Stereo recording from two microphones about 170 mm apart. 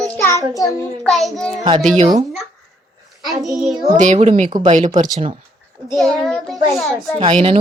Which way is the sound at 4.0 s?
40° right (ahead or behind).